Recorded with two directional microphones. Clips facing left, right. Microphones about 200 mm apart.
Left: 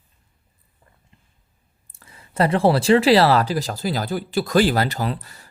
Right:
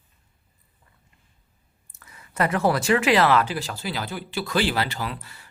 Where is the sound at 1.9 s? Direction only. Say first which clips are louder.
Left 3 dB; 30° left (ahead or behind).